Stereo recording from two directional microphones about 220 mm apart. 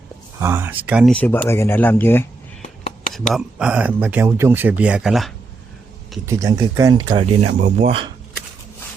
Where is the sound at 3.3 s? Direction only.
5° right (ahead or behind).